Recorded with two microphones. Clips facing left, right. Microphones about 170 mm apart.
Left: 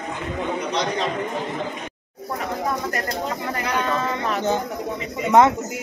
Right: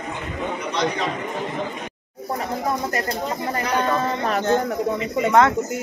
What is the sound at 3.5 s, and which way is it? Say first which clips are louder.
Speech: right 3 dB; 40° right (ahead or behind).